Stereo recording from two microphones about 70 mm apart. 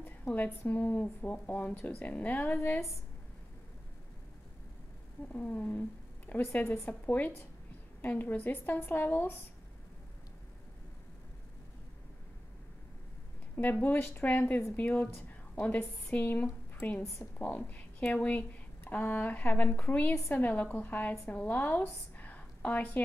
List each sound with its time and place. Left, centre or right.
0.0 s a woman's voice: left
5.3 s a woman's voice: centre
13.6 s a woman's voice: left
22.2 s a sound: left